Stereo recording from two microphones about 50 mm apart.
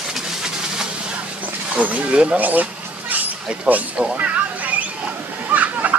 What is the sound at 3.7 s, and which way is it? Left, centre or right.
Speech, right.